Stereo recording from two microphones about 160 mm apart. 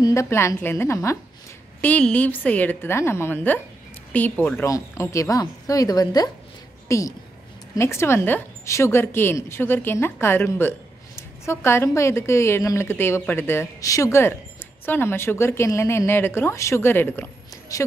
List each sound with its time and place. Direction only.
0.0 s a woman's voice: 20° left (ahead or behind)